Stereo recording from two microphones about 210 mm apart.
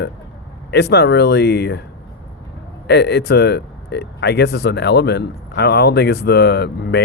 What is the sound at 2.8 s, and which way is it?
Speech, 50° left (ahead or behind).